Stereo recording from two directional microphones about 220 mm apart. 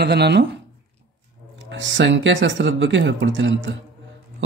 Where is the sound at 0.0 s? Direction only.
50° right (ahead or behind).